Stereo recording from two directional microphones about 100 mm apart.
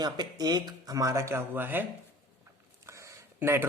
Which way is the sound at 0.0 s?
40° right (ahead or behind).